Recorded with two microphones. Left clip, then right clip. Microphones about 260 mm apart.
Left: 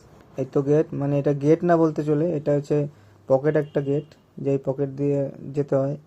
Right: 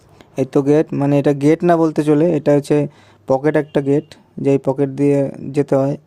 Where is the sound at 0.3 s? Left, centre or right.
Right.